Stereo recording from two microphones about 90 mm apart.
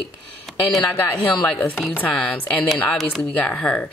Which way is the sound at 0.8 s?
20° left (ahead or behind).